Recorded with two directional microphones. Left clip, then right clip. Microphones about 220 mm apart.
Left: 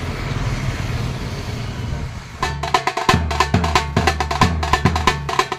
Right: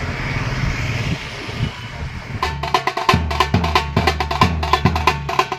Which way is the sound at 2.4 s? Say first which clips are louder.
Even; 10° right (ahead or behind).